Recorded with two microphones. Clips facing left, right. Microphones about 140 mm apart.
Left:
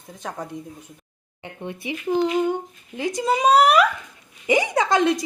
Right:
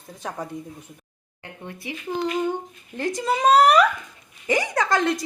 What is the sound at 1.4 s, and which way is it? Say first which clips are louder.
A woman's voice: left 5 dB; 20° left (ahead or behind).